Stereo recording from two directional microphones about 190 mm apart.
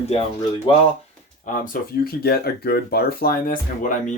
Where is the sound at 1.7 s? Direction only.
50° left (ahead or behind).